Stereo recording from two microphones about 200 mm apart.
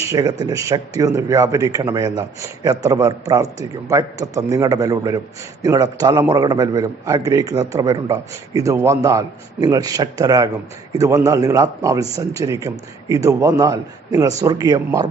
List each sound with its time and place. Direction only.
0.1 s a man's voice: 20° right (ahead or behind)